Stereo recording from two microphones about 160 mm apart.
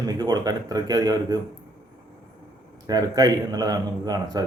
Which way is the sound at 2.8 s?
25° right (ahead or behind).